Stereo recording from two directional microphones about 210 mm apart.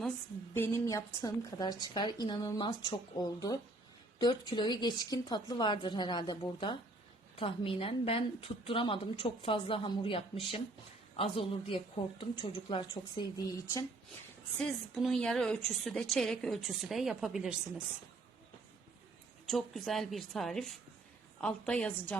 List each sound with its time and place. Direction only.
0.5 s a woman's voice: 15° left (ahead or behind)
14.6 s a woman's voice: centre (ahead or behind)
19.5 s a woman's voice: centre (ahead or behind)